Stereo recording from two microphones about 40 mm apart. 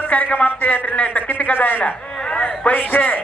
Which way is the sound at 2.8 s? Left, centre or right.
Left.